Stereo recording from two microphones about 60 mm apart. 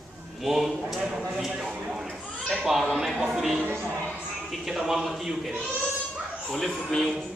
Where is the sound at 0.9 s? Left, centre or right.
Centre.